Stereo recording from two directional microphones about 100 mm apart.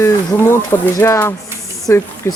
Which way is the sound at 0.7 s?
30° left (ahead or behind).